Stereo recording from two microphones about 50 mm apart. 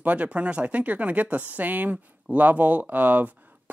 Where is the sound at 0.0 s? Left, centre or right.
Right.